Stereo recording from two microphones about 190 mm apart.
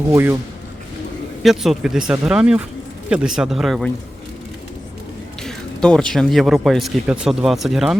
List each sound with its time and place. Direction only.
0.1 s speech: 10° right (ahead or behind)
1.4 s speech: centre (ahead or behind)
5.4 s speech: 5° left (ahead or behind)